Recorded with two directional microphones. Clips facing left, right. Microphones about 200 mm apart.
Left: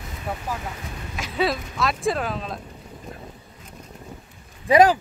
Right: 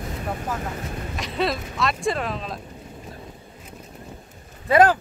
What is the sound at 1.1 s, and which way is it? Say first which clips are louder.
Speech: left 1 dB; centre (ahead or behind).